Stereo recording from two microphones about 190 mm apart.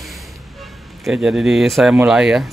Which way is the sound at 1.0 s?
Centre (ahead or behind).